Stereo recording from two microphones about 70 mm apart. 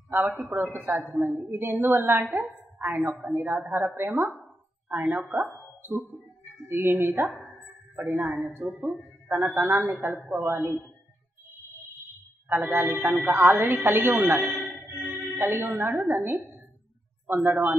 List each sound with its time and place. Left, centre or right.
0.1 s a woman's voice: right
4.4 s a sound: right
5.8 s ping: right
6.7 s a woman's voice: right
12.4 s a woman's voice: right